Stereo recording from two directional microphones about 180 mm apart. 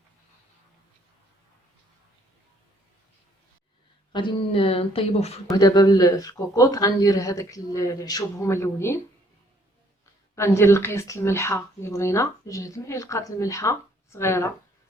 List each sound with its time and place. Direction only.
4.1 s a woman's voice: 25° left (ahead or behind)
5.5 s speech: 20° left (ahead or behind)
10.3 s speech: 15° left (ahead or behind)